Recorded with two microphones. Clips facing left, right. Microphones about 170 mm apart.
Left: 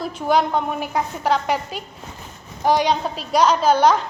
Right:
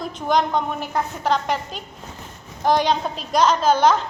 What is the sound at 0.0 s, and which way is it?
A woman's voice, 5° left (ahead or behind).